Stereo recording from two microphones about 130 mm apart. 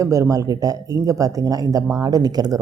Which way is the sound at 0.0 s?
25° right (ahead or behind).